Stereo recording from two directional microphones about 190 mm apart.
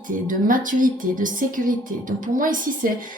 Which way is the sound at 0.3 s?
45° right (ahead or behind).